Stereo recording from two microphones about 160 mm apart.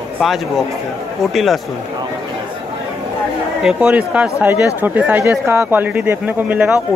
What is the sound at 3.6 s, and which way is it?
Speech, 5° right (ahead or behind).